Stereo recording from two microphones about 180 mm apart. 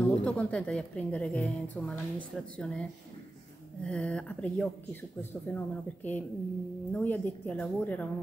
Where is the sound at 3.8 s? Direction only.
5° left (ahead or behind).